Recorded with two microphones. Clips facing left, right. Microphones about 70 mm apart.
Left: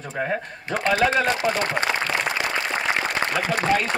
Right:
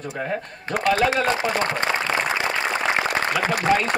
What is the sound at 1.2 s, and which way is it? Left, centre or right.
Speech, right.